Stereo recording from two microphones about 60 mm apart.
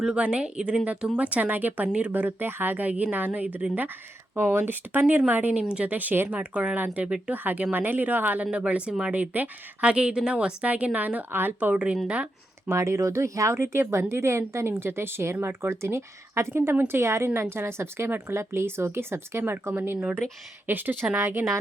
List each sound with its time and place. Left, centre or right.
0.1 s a woman's voice: right
4.4 s a woman's voice: right
5.6 s speech: centre
5.9 s a woman's voice: right
8.4 s speech: right
9.1 s a woman's voice: right
11.7 s a woman's voice: centre
12.6 s speech: right
21.2 s speech: right